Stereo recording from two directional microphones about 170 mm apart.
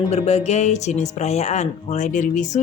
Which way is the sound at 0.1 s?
40° left (ahead or behind).